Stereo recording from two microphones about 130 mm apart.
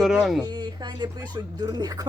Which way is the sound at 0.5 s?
35° right (ahead or behind).